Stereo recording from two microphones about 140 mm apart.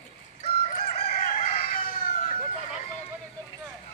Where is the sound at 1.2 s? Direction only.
75° left (ahead or behind).